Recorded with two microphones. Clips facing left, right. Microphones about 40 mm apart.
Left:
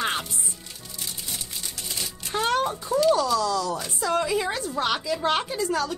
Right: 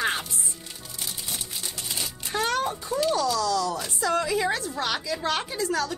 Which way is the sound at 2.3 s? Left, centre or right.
Left.